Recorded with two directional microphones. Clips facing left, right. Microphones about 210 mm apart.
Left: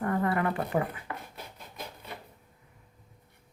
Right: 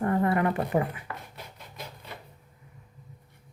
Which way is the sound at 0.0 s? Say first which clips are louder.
Right 3 dB; 25° right (ahead or behind).